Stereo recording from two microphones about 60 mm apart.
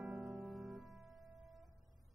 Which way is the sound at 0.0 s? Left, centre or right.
Centre.